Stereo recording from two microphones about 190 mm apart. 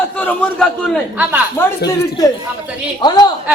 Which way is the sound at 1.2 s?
10° right (ahead or behind).